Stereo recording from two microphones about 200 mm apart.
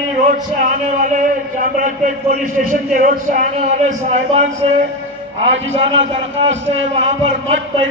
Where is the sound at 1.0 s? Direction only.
40° right (ahead or behind).